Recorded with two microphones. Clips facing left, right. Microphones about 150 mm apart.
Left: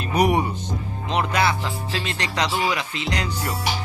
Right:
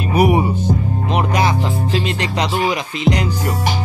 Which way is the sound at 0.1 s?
5° right (ahead or behind).